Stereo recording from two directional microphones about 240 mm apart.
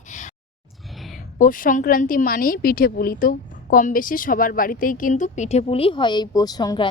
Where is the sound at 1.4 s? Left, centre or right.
Left.